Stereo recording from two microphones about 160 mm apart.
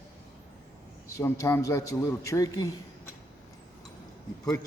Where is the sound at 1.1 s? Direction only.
20° left (ahead or behind).